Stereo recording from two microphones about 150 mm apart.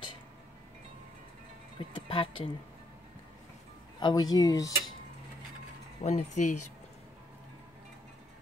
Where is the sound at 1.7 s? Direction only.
35° left (ahead or behind).